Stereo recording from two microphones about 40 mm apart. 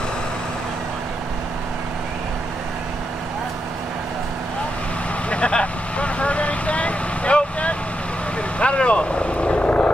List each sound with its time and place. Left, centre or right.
5.3 s vehicle: left